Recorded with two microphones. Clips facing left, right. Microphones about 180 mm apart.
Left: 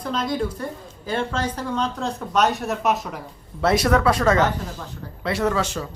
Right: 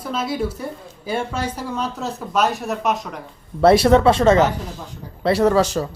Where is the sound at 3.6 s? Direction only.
30° right (ahead or behind).